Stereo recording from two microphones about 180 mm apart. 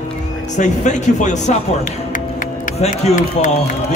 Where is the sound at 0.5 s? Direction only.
40° left (ahead or behind).